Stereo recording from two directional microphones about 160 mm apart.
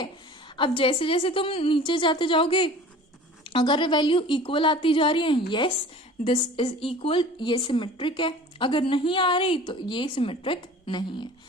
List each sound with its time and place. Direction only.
0.5 s a woman's voice: 35° left (ahead or behind)